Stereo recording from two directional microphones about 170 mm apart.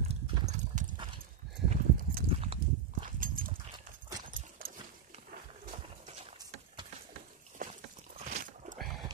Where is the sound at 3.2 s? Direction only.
55° right (ahead or behind).